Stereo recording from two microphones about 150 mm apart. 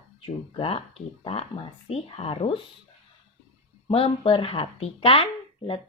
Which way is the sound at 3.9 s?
40° left (ahead or behind).